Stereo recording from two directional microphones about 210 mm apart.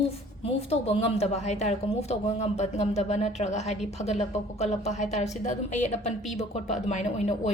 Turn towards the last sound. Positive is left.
turn(degrees=35)  # may be behind; listen again after turning